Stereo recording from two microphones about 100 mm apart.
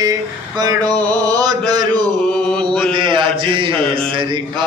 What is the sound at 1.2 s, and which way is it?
Mantra, 40° right (ahead or behind).